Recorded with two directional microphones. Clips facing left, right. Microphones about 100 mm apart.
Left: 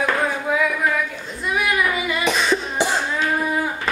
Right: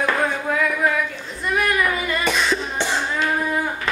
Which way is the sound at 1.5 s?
5° left (ahead or behind).